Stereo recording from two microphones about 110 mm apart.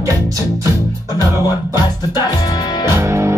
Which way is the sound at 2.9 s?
25° right (ahead or behind).